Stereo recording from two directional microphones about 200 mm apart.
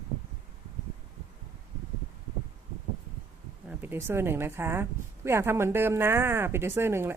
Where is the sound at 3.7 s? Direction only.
10° right (ahead or behind).